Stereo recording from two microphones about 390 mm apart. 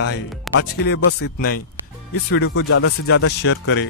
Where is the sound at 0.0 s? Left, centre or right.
Left.